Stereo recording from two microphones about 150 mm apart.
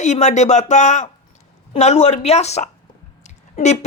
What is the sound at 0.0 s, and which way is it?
Speech, 50° left (ahead or behind).